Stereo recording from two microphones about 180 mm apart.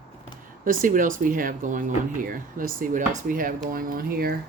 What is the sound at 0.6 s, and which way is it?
Speech, 50° right (ahead or behind).